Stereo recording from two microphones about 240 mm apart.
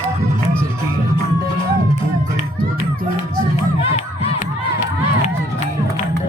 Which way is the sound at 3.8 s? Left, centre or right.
Left.